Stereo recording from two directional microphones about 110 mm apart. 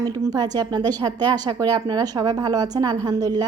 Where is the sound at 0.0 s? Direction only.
35° right (ahead or behind).